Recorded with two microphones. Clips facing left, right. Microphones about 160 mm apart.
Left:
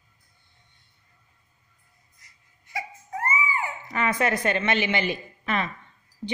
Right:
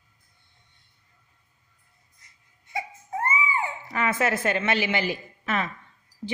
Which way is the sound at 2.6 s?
25° right (ahead or behind).